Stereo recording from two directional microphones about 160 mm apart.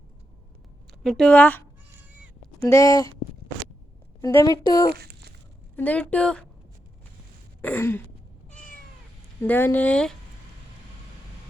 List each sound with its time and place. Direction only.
1.0 s speech: 5° left (ahead or behind)
2.6 s speech: 20° left (ahead or behind)
4.2 s speech: 20° left (ahead or behind)
4.9 s a sound: 85° right
5.7 s speech: 10° left (ahead or behind)
7.6 s speech: 10° left (ahead or behind)
9.5 s speech: 10° left (ahead or behind)